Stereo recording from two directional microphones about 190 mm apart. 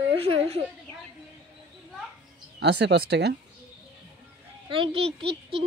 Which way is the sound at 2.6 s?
60° right (ahead or behind).